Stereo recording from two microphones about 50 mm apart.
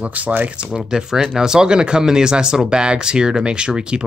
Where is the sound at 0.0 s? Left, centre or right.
Right.